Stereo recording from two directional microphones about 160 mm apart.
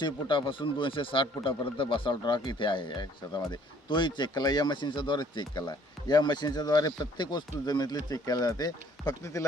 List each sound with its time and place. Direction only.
0.0 s speech: 30° left (ahead or behind)